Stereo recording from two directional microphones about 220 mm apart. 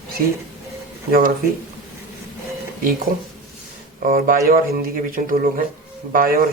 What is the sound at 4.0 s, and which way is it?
Speech, 40° right (ahead or behind).